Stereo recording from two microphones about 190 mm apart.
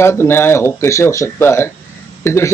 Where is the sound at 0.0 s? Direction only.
15° left (ahead or behind).